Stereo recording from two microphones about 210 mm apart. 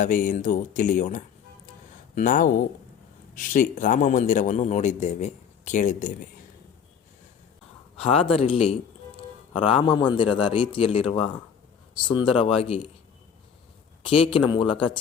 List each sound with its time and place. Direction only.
0.0 s a man's voice: 40° left (ahead or behind)
7.9 s a man's voice: 25° left (ahead or behind)
14.0 s a man's voice: 25° left (ahead or behind)